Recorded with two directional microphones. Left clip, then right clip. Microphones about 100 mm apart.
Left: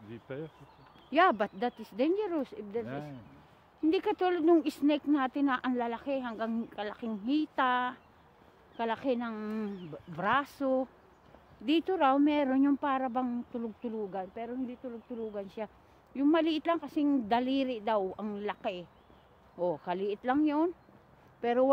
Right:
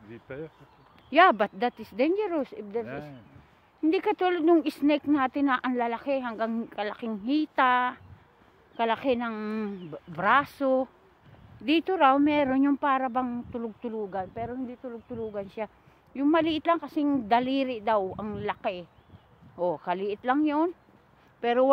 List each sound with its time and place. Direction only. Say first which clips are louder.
0.1 s speech: right 2 dB; 10° left (ahead or behind)
1.1 s speech: right 6 dB; 35° right (ahead or behind)
5.8 s speech: right 5 dB; 35° right (ahead or behind)
8.7 s a woman's voice: right 6 dB; 50° right (ahead or behind)
10.2 s speech: right 7 dB; 25° right (ahead or behind)
15.3 s speech: right 5 dB; 10° right (ahead or behind)
16.8 s speech: right 3 dB; 20° right (ahead or behind)